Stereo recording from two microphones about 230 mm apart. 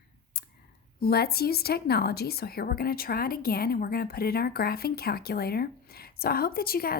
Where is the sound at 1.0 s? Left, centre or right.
Left.